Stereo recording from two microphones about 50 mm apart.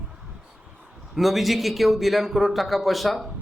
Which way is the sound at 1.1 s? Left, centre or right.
Centre.